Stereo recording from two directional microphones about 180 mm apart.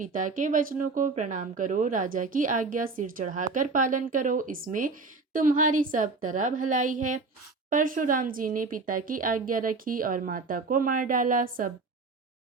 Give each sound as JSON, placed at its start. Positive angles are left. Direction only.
{"t": 0.0, "sound": "speech", "side_deg": -45}